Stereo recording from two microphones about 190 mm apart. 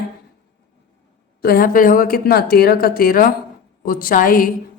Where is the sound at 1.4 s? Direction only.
50° left (ahead or behind).